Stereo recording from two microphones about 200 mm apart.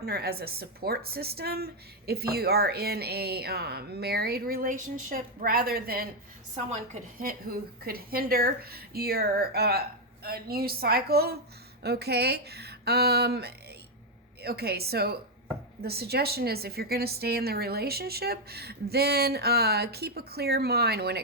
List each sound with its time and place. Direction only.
0.0 s a woman's voice: 50° right (ahead or behind)
7.2 s a woman's voice: 45° right (ahead or behind)